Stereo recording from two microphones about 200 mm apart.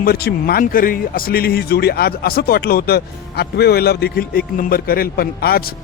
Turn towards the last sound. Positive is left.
turn(degrees=50)  # may be behind; listen again after turning